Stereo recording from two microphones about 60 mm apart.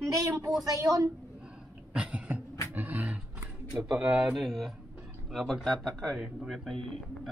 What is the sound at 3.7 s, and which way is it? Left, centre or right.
A man's voice, centre.